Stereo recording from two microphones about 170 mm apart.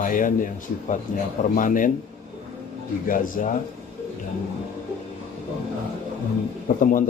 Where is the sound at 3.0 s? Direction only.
55° left (ahead or behind).